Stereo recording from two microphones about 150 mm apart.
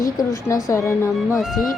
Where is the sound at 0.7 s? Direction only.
20° left (ahead or behind).